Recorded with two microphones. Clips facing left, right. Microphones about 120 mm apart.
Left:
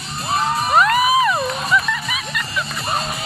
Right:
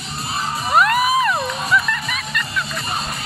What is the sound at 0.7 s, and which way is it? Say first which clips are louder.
Music: even; centre (ahead or behind).